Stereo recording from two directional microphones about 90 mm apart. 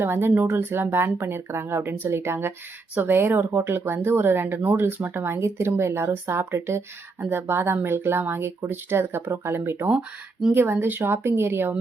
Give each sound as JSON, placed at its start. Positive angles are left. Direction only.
{"t": 0.0, "sound": "speech", "side_deg": -25}